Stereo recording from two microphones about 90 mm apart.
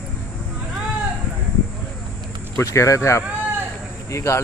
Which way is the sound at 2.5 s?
35° left (ahead or behind).